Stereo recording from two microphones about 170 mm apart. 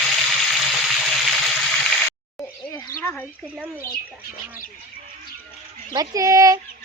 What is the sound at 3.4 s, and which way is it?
Speech, 10° right (ahead or behind).